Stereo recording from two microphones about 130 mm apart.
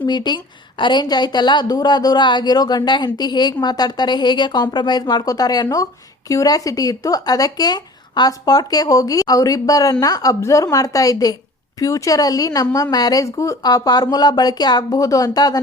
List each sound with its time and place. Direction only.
0.0 s a woman's voice: 35° left (ahead or behind)